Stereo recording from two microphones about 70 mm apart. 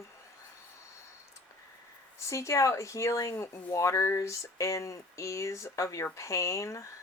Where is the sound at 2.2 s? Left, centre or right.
Left.